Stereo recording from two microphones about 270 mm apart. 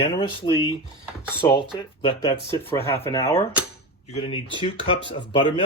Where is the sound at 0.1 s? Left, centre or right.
Centre.